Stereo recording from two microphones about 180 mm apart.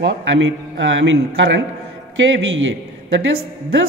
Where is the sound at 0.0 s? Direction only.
90° right.